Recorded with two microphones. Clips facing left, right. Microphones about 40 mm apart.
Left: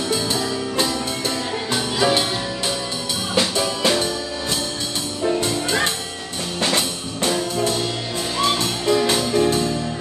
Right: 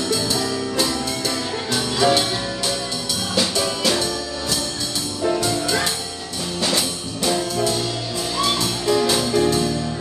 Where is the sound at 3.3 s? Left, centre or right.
Left.